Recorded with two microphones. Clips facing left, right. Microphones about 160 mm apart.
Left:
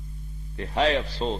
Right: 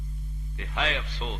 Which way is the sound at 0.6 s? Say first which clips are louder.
Left 8 dB; 35° left (ahead or behind).